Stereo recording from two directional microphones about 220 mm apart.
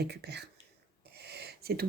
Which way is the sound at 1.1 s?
50° right (ahead or behind).